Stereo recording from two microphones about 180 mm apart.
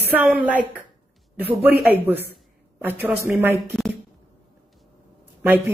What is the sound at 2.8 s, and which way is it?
Speech, 10° right (ahead or behind).